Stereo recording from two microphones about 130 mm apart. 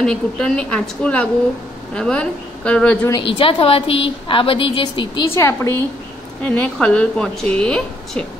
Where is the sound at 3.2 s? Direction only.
45° left (ahead or behind).